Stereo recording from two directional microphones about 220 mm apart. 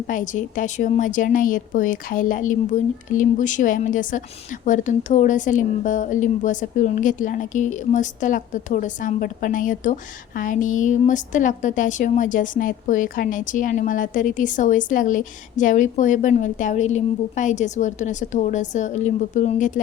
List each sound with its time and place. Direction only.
0.1 s speech: 35° left (ahead or behind)